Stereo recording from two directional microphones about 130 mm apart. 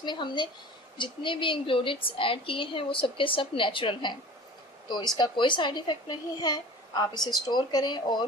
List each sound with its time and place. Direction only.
0.0 s a woman's voice: 35° left (ahead or behind)